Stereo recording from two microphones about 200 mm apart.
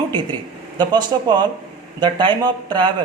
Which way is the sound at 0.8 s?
20° right (ahead or behind).